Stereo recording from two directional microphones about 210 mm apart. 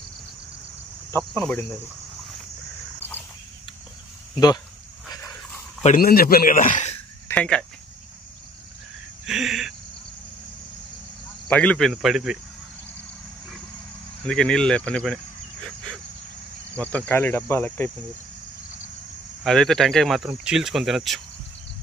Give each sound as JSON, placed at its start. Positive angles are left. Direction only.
{"t": 1.1, "sound": "cricket", "side_deg": 5}
{"t": 3.0, "sound": "a sound", "side_deg": 10}
{"t": 5.8, "sound": "a man's voice", "side_deg": 40}
{"t": 7.2, "sound": "speech", "side_deg": 5}
{"t": 9.2, "sound": "a sound", "side_deg": 0}
{"t": 11.4, "sound": "speech", "side_deg": 5}
{"t": 14.2, "sound": "speech", "side_deg": 5}
{"t": 16.7, "sound": "cricket", "side_deg": 5}
{"t": 19.4, "sound": "speech", "side_deg": 0}